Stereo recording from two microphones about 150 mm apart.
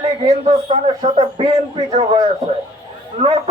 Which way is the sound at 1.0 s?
35° right (ahead or behind).